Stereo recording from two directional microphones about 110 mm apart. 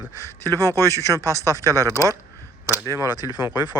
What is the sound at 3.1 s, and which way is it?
Speech, 40° left (ahead or behind).